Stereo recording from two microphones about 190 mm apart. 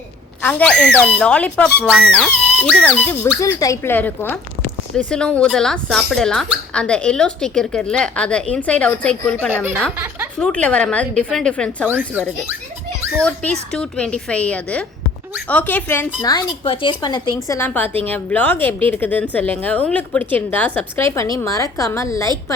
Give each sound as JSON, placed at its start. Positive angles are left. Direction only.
{"t": 0.4, "sound": "a woman's voice", "side_deg": 5}
{"t": 11.9, "sound": "speech", "side_deg": -10}
{"t": 13.1, "sound": "a woman's voice", "side_deg": 5}
{"t": 16.2, "sound": "a woman's voice", "side_deg": 25}